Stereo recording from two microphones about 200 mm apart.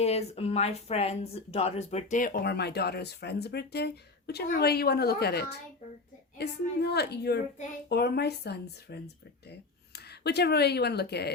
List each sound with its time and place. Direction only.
0.0 s speech: 30° left (ahead or behind); by 11.3 s 55° left (ahead or behind)